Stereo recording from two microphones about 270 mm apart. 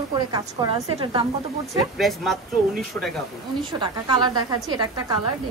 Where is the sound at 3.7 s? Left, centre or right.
Centre.